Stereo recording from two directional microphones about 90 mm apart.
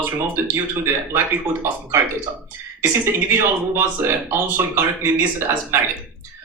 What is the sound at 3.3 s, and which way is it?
Speech, 25° right (ahead or behind).